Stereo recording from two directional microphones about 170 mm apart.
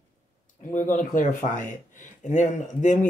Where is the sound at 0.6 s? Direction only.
50° left (ahead or behind).